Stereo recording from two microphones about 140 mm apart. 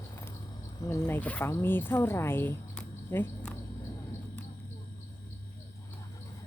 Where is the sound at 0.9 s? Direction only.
15° left (ahead or behind).